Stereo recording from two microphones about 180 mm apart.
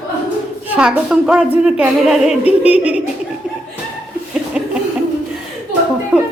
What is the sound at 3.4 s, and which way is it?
Laughter, 5° right (ahead or behind).